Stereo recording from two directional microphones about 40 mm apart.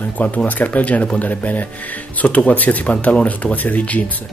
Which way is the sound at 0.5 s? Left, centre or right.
Left.